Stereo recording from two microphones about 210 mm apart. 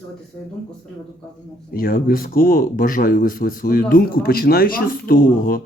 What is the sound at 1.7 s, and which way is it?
Speech, 45° left (ahead or behind).